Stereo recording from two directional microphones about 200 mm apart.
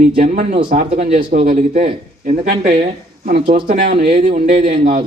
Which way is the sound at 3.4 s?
30° right (ahead or behind).